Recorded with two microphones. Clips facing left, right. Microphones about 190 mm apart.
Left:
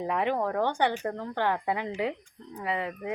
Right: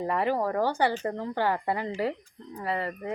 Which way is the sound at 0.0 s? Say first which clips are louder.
Right 1 dB; centre (ahead or behind).